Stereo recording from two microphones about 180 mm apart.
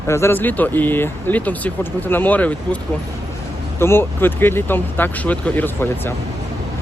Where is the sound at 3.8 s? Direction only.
15° left (ahead or behind).